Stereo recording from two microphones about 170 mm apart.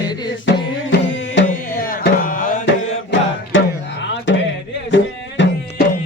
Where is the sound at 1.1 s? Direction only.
90° left.